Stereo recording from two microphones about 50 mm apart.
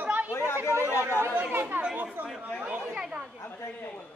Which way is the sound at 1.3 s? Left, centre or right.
Right.